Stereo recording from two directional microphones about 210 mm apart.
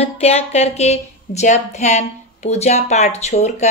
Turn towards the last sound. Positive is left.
turn(degrees=30)  # may be behind; listen again after turning